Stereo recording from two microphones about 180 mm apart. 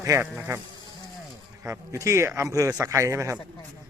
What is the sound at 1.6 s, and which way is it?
Speech, 15° right (ahead or behind).